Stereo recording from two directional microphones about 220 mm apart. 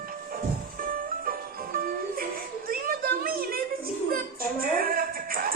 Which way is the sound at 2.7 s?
40° right (ahead or behind).